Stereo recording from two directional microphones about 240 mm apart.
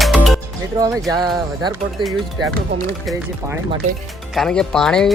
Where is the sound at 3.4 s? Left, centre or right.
Centre.